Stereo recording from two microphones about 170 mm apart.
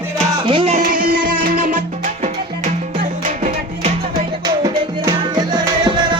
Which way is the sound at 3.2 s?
45° right (ahead or behind).